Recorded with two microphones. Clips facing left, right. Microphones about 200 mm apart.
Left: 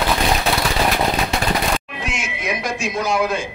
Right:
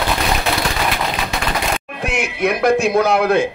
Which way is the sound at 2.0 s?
60° right (ahead or behind).